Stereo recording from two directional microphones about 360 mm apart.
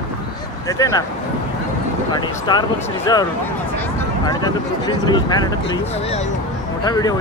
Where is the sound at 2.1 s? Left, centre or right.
Centre.